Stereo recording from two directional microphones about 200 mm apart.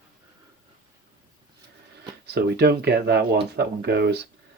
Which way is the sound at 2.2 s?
55° right (ahead or behind).